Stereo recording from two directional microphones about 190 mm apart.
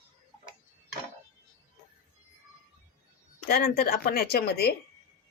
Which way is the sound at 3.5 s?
50° left (ahead or behind).